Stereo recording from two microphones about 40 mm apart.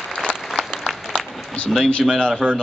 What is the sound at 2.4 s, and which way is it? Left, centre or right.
Speech, left.